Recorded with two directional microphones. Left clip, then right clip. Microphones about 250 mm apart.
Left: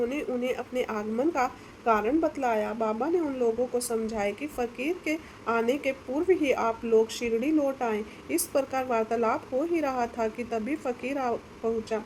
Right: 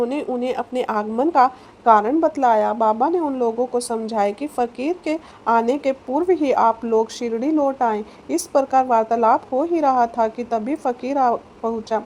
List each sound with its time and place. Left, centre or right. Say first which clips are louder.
0.1 s a woman's voice: right 7 dB; right